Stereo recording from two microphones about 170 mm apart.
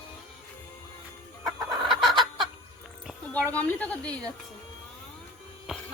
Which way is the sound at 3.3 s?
10° left (ahead or behind).